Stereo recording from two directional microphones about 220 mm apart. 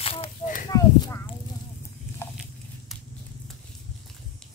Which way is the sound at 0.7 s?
15° left (ahead or behind).